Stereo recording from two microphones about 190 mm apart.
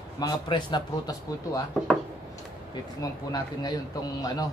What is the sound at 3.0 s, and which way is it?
A man's voice, 20° left (ahead or behind).